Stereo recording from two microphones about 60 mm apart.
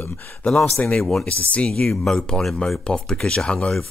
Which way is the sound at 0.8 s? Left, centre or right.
Centre.